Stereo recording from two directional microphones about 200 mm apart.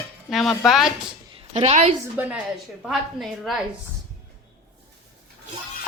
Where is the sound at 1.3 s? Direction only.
30° right (ahead or behind).